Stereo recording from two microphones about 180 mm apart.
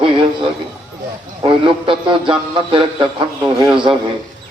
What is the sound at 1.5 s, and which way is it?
A man's voice, 30° right (ahead or behind).